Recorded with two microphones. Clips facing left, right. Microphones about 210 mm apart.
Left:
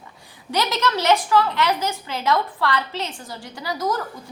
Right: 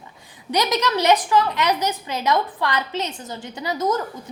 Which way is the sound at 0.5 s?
15° right (ahead or behind).